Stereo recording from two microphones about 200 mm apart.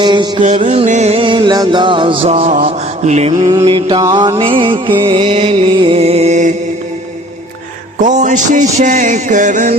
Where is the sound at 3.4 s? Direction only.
25° right (ahead or behind).